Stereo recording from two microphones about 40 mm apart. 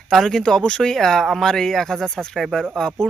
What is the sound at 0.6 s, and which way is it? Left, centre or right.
Speech, left.